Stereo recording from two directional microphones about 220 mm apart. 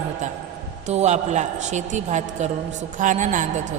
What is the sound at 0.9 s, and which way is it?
A woman's voice, 30° right (ahead or behind).